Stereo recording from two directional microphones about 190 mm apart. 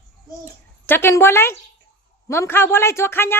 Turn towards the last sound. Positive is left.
turn(degrees=10)  # may be behind; listen again after turning